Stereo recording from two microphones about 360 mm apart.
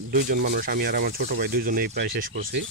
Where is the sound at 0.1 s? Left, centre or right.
Right.